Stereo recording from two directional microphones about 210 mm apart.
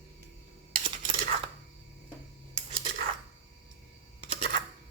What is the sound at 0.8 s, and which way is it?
Cutlery, 25° right (ahead or behind).